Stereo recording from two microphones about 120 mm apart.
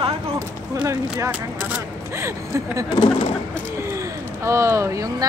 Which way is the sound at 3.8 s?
25° right (ahead or behind).